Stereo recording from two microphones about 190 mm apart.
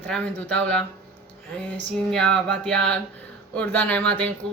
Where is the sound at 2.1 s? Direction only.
5° left (ahead or behind).